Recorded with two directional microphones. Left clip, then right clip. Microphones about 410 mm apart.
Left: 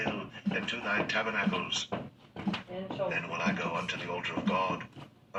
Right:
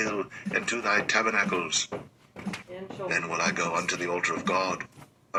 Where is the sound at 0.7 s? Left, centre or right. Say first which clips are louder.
Right 6 dB; right.